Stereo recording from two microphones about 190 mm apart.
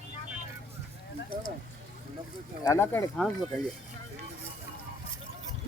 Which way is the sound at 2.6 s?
15° left (ahead or behind).